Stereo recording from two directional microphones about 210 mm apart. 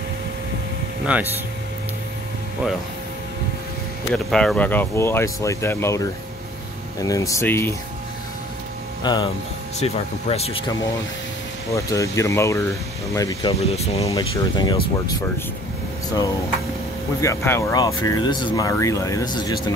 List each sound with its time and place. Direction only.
1.1 s speech: 5° right (ahead or behind)
4.1 s speech: centre (ahead or behind)
9.0 s speech: 20° left (ahead or behind)
9.8 s speech: 30° left (ahead or behind)
11.7 s speech: 15° left (ahead or behind)
13.5 s speech: 30° left (ahead or behind)
14.1 s speech: 20° left (ahead or behind)
17.2 s speech: 15° left (ahead or behind)